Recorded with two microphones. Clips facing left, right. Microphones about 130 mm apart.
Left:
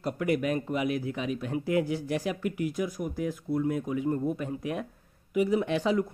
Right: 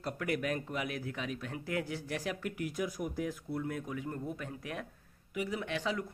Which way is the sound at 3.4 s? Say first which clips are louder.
Left 9 dB; 15° left (ahead or behind).